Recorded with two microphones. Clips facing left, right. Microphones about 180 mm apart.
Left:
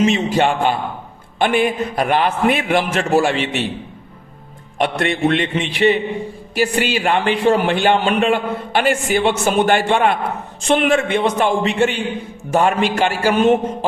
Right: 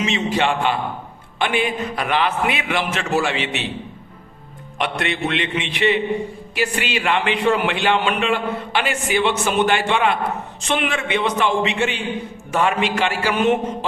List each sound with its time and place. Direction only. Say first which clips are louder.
0.0 s a man's voice: left 5 dB; 45° left (ahead or behind)
4.8 s a man's voice: left 5 dB; 45° left (ahead or behind)